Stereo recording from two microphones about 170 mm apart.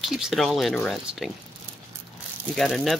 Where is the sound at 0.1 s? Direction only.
Centre (ahead or behind).